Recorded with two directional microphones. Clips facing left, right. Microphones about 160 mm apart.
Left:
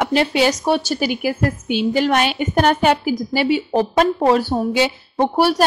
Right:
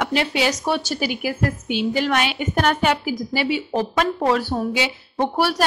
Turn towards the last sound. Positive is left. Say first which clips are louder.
# left 4 dB
turn(degrees=30)  # may be behind; listen again after turning